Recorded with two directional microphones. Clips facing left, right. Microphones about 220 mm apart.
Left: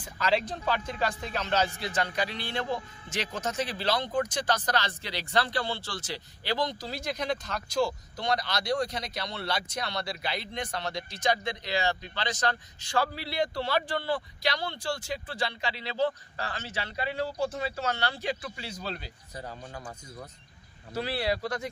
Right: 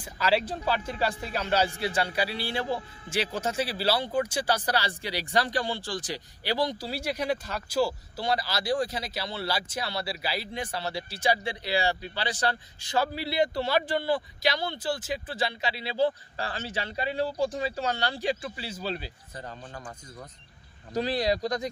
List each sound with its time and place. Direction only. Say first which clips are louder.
0.0 s speech: right 2 dB; 10° right (ahead or behind)
20.9 s speech: right 3 dB; 15° right (ahead or behind)